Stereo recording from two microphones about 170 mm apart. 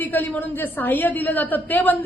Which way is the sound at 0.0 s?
10° left (ahead or behind).